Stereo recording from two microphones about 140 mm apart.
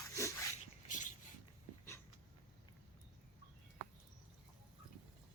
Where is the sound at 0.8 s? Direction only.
65° left (ahead or behind).